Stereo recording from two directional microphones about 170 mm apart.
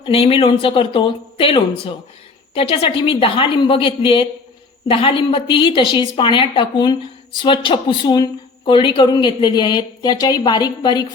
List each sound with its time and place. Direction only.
0.0 s a woman's voice: 35° left (ahead or behind)